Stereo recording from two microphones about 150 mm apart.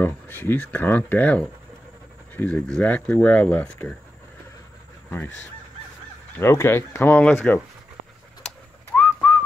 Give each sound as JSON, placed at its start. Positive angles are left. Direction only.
{"t": 0.0, "sound": "speech", "side_deg": 15}
{"t": 6.3, "sound": "speech", "side_deg": 15}
{"t": 8.5, "sound": "whistling", "side_deg": 5}